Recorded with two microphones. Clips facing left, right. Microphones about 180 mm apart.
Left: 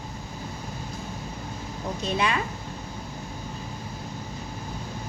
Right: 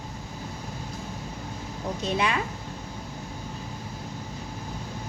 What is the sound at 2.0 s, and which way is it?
Speech, 15° right (ahead or behind).